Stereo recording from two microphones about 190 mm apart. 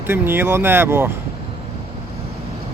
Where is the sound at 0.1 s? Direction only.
10° right (ahead or behind).